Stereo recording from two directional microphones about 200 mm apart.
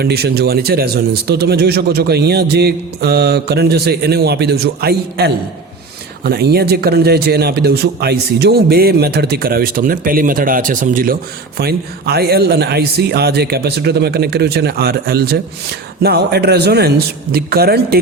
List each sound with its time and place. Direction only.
0.0 s a man's voice: 50° right (ahead or behind)